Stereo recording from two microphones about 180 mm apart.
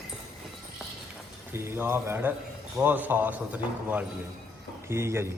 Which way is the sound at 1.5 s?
15° right (ahead or behind).